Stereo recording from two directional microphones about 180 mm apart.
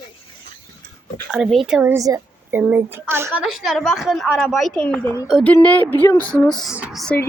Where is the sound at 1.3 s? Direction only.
Centre (ahead or behind).